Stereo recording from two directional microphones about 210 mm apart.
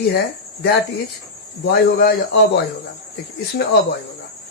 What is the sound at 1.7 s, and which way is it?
Speech, 50° left (ahead or behind).